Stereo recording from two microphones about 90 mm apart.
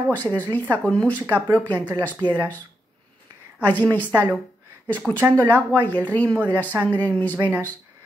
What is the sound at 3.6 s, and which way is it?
Speech, 20° left (ahead or behind).